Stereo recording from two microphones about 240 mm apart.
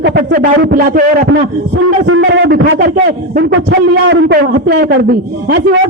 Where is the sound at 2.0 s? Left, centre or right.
Right.